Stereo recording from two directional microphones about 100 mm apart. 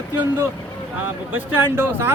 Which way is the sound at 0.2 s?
25° right (ahead or behind).